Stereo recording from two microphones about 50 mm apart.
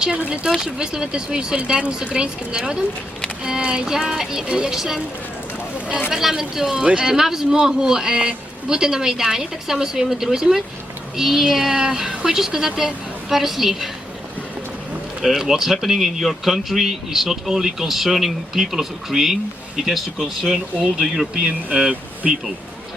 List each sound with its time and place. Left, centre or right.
0.0 s speech: centre
6.1 s speech: centre
15.2 s speech: centre